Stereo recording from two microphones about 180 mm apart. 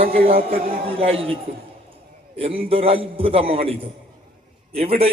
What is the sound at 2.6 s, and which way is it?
Speech, 30° right (ahead or behind).